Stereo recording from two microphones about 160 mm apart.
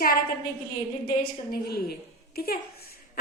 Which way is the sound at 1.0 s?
65° left (ahead or behind).